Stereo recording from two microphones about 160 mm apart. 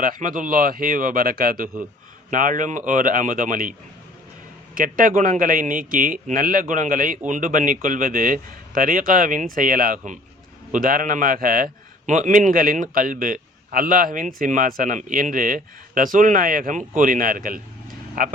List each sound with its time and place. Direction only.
0.0 s a man's voice: 60° right (ahead or behind)